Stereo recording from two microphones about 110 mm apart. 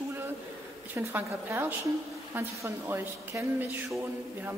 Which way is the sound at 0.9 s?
20° right (ahead or behind).